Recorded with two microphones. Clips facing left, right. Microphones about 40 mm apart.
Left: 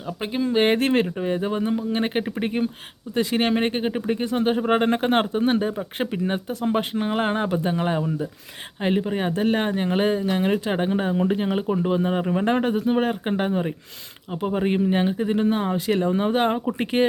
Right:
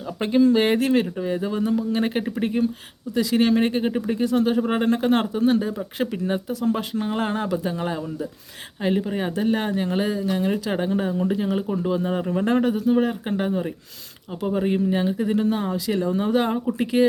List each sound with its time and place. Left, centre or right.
0.2 s speech: centre
0.5 s speech: left
6.5 s speech: left
11.6 s speech: left
11.9 s speech: left
12.7 s speech: left